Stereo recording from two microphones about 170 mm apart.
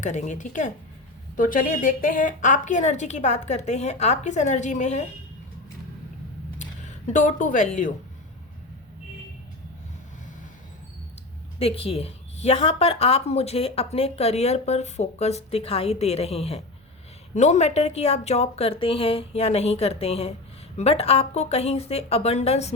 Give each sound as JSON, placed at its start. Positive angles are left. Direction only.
{"t": 0.0, "sound": "a woman's voice", "side_deg": 45}
{"t": 6.6, "sound": "speech", "side_deg": 45}
{"t": 11.6, "sound": "a woman's voice", "side_deg": 35}